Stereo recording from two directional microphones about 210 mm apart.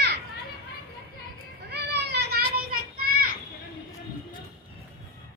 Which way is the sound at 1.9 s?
50° right (ahead or behind).